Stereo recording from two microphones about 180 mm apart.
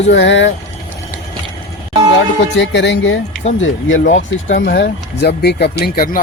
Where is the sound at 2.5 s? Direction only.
80° left.